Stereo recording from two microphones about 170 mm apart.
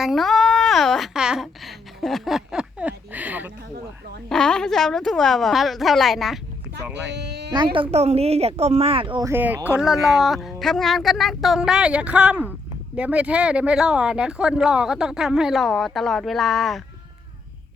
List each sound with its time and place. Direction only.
0.0 s a sound: centre (ahead or behind)
4.3 s speech: 5° left (ahead or behind)
7.0 s speech: 80° right
7.5 s speech: 30° right (ahead or behind)
9.2 s speech: 10° right (ahead or behind)
9.7 s speech: centre (ahead or behind)